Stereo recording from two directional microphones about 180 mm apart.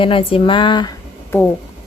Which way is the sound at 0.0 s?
30° left (ahead or behind).